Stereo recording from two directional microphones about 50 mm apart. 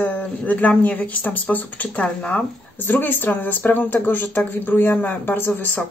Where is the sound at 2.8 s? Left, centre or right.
Left.